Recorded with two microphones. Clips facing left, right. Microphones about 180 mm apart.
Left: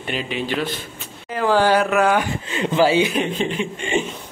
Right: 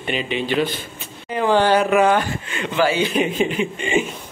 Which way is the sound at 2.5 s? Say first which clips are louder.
Left 3 dB; 25° left (ahead or behind).